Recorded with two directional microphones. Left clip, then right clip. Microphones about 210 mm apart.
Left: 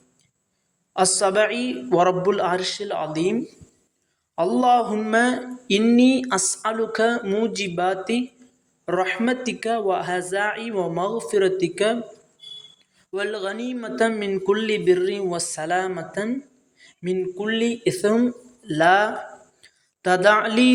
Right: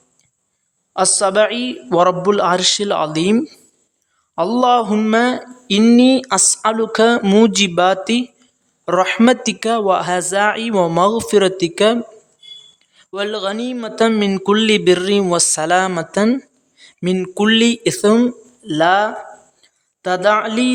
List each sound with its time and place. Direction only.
0.9 s speech: 20° right (ahead or behind)
5.1 s speech: 20° right (ahead or behind)
7.2 s a man's voice: 40° right (ahead or behind)
13.0 s a man's voice: 25° right (ahead or behind)
17.2 s a man's voice: 45° right (ahead or behind); by 20.7 s 15° right (ahead or behind)